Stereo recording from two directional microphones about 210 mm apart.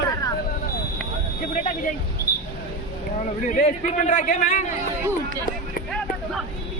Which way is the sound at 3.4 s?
35° left (ahead or behind).